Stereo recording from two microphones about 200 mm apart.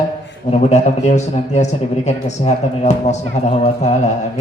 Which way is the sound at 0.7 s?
35° left (ahead or behind).